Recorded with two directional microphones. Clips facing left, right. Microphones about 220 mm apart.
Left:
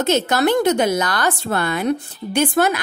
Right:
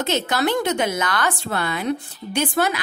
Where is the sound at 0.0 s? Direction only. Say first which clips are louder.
Left 4 dB; 45° left (ahead or behind).